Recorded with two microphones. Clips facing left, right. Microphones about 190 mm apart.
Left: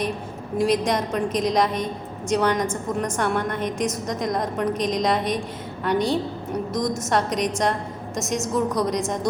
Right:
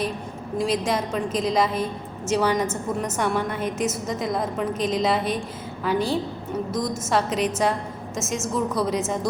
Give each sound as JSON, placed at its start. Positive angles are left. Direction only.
{"t": 0.6, "sound": "a woman's voice", "side_deg": 0}